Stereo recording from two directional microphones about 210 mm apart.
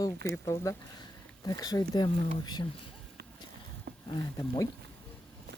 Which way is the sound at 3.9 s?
50° right (ahead or behind).